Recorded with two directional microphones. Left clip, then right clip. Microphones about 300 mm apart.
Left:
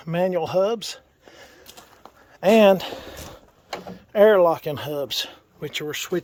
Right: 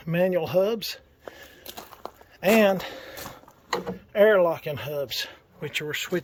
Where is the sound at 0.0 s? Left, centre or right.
Centre.